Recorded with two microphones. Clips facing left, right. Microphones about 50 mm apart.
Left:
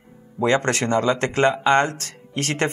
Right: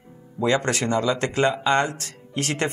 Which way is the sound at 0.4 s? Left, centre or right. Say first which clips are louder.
Left 2 dB; left.